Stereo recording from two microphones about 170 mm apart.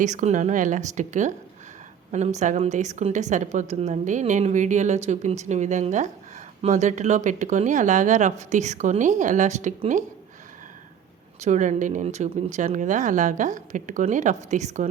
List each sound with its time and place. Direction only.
0.0 s speech: 45° right (ahead or behind)
11.3 s speech: 45° right (ahead or behind)